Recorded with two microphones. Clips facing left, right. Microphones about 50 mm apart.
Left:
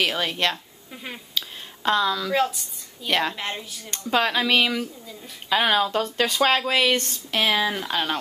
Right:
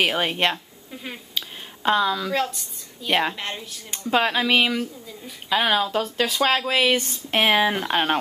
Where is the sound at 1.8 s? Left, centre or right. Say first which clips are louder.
Right 1 dB; centre.